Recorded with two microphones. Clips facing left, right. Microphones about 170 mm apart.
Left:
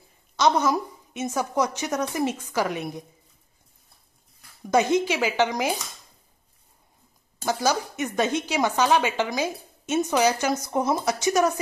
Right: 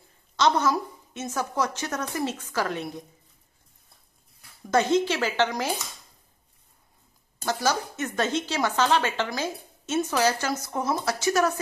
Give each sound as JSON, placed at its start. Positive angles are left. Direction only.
{"t": 0.4, "sound": "speech", "side_deg": 15}
{"t": 4.6, "sound": "speech", "side_deg": 15}
{"t": 7.3, "sound": "speech", "side_deg": 15}